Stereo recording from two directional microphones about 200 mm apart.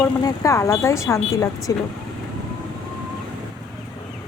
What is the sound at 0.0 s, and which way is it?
Speech, 15° left (ahead or behind).